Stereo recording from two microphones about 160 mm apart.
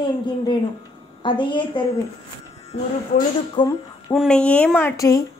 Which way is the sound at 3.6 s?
25° left (ahead or behind).